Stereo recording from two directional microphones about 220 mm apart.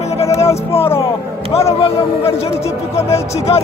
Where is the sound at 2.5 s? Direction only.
10° left (ahead or behind).